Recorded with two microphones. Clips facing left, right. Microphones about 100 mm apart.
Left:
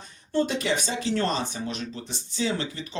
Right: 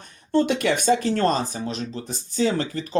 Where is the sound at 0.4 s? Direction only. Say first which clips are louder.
Right 7 dB; 60° right (ahead or behind).